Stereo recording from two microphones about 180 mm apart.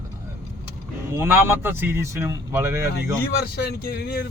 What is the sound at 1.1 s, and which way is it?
Speech, 10° right (ahead or behind).